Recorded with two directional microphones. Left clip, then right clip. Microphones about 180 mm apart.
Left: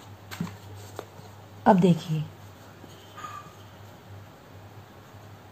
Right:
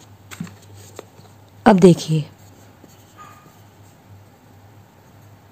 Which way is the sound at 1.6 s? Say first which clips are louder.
Right 8 dB; 55° right (ahead or behind).